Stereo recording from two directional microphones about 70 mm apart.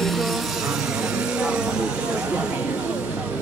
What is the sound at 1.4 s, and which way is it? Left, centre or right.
Speech, centre.